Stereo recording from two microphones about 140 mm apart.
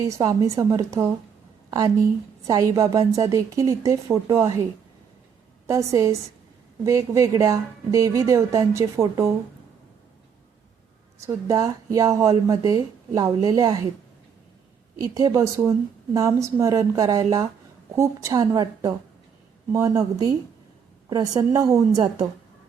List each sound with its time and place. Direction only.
0.1 s a woman's voice: 25° right (ahead or behind)
5.6 s a woman's voice: 25° right (ahead or behind)
11.4 s a woman's voice: 25° right (ahead or behind)
15.1 s a woman's voice: 25° right (ahead or behind)